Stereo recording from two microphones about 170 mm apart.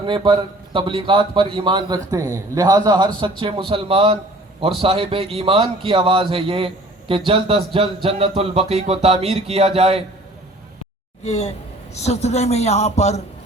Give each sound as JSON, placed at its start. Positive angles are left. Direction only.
{"t": 0.0, "sound": "a man's voice", "side_deg": -30}
{"t": 11.2, "sound": "a man's voice", "side_deg": 40}